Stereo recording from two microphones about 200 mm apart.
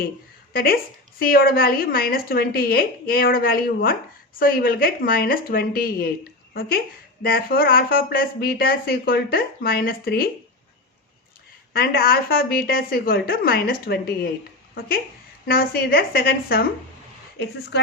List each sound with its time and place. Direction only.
0.5 s speech: 50° left (ahead or behind)
11.7 s speech: 50° left (ahead or behind)